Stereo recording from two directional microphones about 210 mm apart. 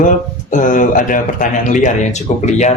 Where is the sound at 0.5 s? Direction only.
40° left (ahead or behind).